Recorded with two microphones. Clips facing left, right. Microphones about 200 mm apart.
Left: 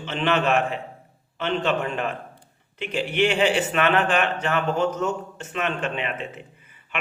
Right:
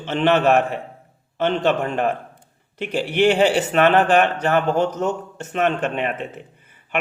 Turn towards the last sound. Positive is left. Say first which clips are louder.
# right 5 dB
turn(degrees=-45)  # may be behind; listen again after turning